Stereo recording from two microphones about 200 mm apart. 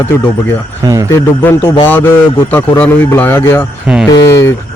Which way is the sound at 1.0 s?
10° left (ahead or behind).